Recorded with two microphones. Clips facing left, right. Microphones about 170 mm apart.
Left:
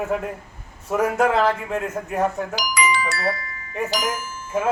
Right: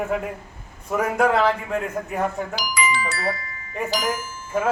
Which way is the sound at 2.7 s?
65° left (ahead or behind).